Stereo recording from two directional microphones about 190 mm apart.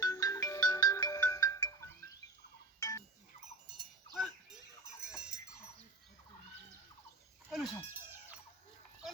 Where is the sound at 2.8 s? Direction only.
20° left (ahead or behind).